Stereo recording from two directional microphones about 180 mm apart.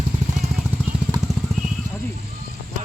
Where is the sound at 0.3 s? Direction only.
Centre (ahead or behind).